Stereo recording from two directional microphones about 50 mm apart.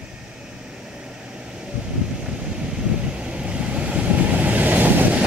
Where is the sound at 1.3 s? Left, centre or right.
Centre; by 5.2 s right.